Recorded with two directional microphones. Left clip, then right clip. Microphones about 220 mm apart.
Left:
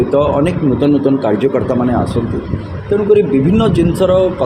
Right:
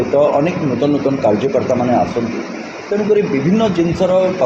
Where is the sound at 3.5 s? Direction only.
50° left (ahead or behind).